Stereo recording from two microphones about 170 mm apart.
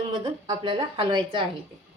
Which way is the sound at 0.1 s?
25° right (ahead or behind).